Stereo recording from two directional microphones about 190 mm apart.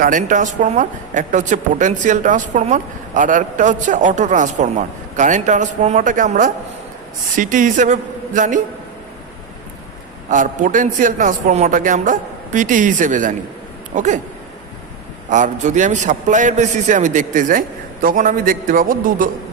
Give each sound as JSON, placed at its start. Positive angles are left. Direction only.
{"t": 0.0, "sound": "a man's voice", "side_deg": -45}
{"t": 10.2, "sound": "a man's voice", "side_deg": -40}
{"t": 15.3, "sound": "a man's voice", "side_deg": -40}